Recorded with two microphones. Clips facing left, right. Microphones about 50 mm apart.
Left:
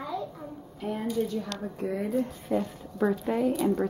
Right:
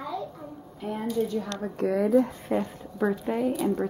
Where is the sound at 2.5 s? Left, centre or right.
Right.